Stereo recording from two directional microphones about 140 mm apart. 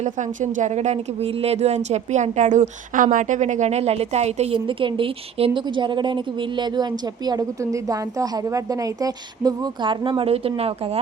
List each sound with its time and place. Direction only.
0.0 s a woman's voice: 60° right (ahead or behind); by 11.0 s 45° right (ahead or behind)